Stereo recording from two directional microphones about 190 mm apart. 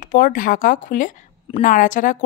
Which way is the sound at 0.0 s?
45° left (ahead or behind).